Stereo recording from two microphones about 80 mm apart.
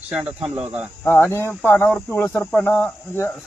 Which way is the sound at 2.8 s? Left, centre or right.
Left.